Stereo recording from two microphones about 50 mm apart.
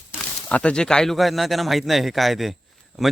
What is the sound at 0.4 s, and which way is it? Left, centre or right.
Speech, left.